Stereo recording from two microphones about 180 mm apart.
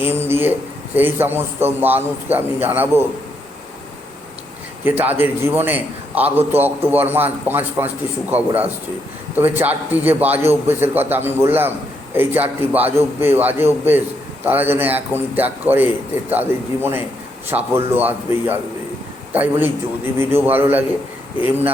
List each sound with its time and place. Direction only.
0.0 s a man's voice: 10° right (ahead or behind)
4.9 s a man's voice: 10° right (ahead or behind)